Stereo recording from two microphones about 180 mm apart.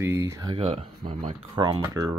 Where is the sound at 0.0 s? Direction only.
15° right (ahead or behind).